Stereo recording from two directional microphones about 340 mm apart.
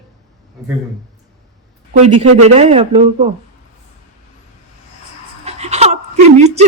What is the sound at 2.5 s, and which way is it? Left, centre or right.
Speech, centre.